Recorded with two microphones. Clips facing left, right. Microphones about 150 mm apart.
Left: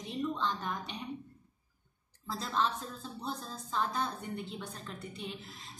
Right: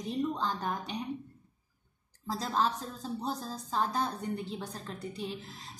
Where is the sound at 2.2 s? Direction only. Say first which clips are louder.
Right 3 dB; 40° right (ahead or behind).